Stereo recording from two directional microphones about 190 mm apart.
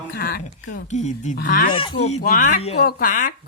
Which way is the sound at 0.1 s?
55° left (ahead or behind).